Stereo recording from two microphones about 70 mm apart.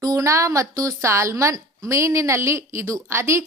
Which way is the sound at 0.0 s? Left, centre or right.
Right.